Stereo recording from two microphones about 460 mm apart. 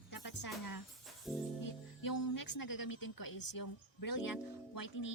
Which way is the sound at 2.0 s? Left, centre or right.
Left.